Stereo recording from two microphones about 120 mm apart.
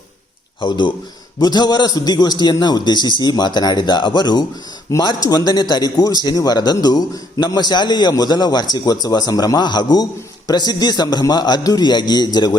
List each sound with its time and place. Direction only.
0.6 s speech: 40° left (ahead or behind)